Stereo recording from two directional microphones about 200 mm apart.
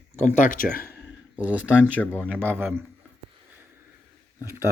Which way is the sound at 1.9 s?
5° left (ahead or behind).